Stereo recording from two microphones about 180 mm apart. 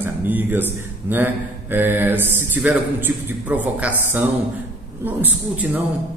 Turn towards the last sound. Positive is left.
turn(degrees=-10)  # may be behind; listen again after turning